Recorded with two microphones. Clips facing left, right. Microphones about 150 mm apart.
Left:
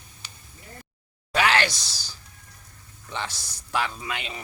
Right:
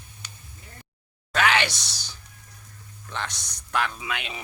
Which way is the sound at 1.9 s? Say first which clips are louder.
Even; 20° right (ahead or behind).